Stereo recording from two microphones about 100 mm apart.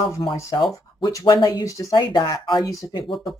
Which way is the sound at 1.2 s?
45° left (ahead or behind).